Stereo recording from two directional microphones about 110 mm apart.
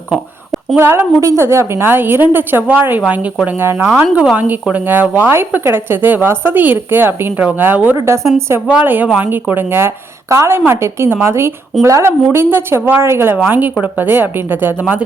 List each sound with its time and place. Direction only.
0.8 s a woman's voice: 20° right (ahead or behind)
8.6 s a woman's voice: 15° right (ahead or behind)